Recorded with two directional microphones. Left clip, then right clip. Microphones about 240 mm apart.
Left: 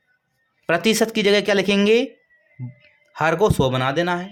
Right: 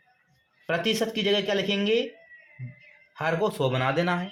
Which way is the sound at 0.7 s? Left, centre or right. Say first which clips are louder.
Left 7 dB; left.